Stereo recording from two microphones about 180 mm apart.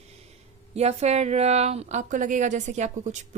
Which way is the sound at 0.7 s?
35° right (ahead or behind).